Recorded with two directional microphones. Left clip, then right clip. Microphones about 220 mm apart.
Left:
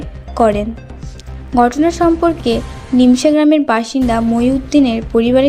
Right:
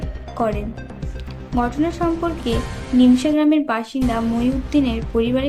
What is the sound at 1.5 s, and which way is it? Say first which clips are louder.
A woman's voice: left 9 dB; 30° left (ahead or behind).